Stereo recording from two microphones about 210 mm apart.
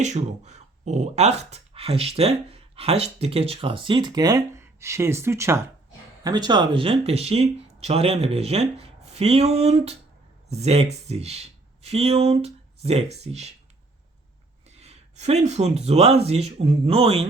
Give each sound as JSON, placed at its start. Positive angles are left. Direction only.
{"t": 0.0, "sound": "speech", "side_deg": -35}
{"t": 14.7, "sound": "speech", "side_deg": -30}